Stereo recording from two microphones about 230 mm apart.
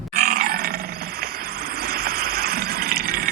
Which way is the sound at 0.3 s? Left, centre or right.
Right.